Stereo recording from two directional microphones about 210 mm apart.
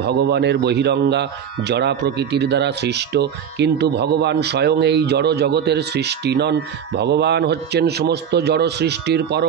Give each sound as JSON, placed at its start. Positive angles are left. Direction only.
{"t": 0.0, "sound": "speech", "side_deg": -55}